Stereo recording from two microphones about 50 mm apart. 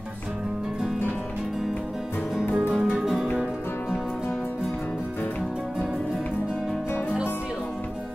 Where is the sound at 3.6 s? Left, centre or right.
Left.